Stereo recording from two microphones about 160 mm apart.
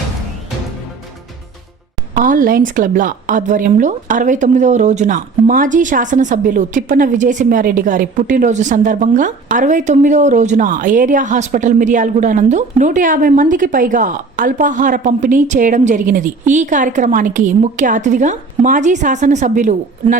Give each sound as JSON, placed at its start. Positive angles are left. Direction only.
{"t": 2.1, "sound": "a woman's voice", "side_deg": -55}